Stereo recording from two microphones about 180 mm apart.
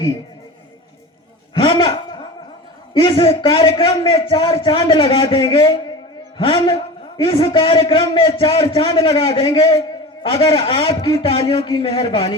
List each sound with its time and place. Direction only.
1.5 s a man's voice: 30° left (ahead or behind)